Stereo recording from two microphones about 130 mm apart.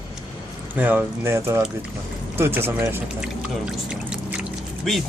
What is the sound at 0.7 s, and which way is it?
Speech, 15° right (ahead or behind).